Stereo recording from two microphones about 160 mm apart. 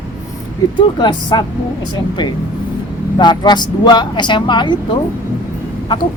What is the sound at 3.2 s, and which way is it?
Speech, 30° left (ahead or behind).